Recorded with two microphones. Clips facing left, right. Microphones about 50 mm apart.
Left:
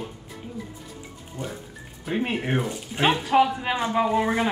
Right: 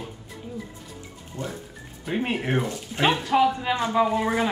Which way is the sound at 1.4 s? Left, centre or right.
Centre.